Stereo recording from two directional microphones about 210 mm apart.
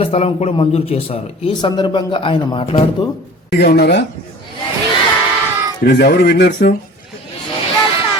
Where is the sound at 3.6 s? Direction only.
50° left (ahead or behind).